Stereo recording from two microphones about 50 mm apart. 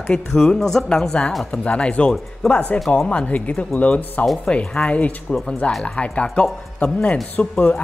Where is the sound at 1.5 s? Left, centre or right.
Left.